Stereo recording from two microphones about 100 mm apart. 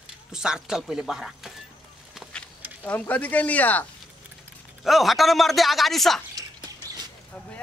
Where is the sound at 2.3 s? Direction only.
15° left (ahead or behind).